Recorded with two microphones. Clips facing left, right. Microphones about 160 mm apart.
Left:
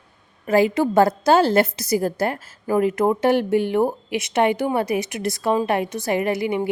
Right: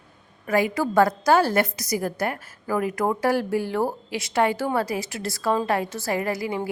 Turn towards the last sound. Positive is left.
turn(degrees=20)  # may be behind; listen again after turning